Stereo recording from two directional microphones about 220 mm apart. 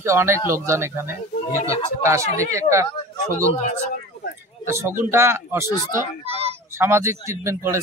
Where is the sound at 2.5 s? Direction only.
15° right (ahead or behind).